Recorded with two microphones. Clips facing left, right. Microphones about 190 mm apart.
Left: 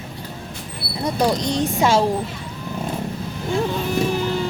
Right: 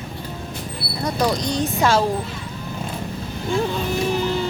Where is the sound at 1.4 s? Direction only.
25° left (ahead or behind).